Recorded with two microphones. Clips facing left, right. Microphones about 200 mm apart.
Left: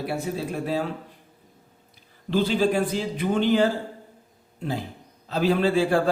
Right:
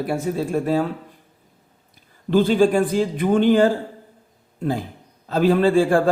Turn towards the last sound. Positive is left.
turn(degrees=-50)  # may be behind; listen again after turning